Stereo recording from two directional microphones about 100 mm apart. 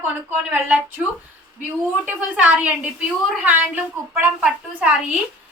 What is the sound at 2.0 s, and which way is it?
A woman's voice, 10° right (ahead or behind).